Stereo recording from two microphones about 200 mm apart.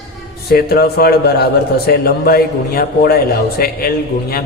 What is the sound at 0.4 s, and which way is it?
A man's voice, 50° left (ahead or behind).